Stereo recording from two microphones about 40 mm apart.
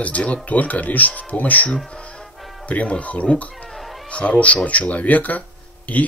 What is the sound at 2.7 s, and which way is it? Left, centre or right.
Speech, left.